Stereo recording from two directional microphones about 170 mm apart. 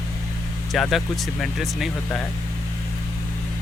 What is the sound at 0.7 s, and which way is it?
Speech, centre (ahead or behind).